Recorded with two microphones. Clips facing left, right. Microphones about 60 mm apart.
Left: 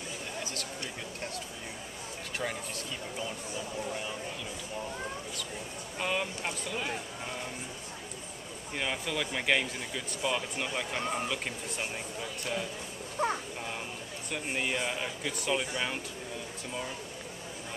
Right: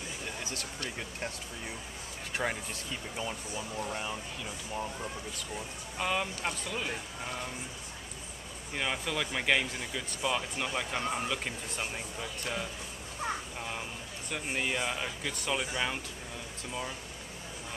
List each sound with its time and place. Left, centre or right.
0.4 s a sound: right
2.4 s speech: right
3.9 s speech: centre
5.9 s speech: centre
8.7 s speech: centre
14.3 s speech: centre